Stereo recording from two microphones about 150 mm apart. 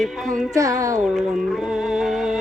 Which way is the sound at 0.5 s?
20° right (ahead or behind).